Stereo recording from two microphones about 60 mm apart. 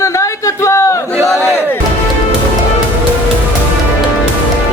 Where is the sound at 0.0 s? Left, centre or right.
Left.